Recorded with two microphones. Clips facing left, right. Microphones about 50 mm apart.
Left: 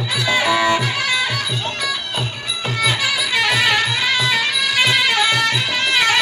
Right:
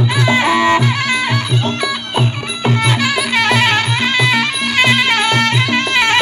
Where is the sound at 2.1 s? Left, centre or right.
Right.